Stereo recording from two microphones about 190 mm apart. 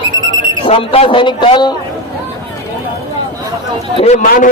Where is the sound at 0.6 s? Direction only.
30° left (ahead or behind).